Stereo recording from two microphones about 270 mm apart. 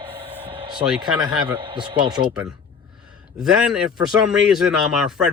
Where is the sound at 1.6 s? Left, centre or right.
Centre.